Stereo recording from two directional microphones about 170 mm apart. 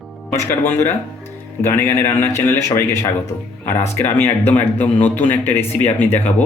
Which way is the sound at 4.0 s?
10° left (ahead or behind).